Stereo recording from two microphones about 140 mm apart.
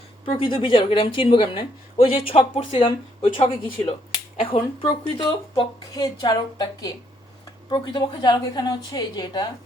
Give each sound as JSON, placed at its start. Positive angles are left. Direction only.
{"t": 0.3, "sound": "a woman's voice", "side_deg": 35}